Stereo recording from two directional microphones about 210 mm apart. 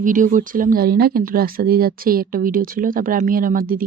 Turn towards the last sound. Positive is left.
turn(degrees=-40)  # may be behind; listen again after turning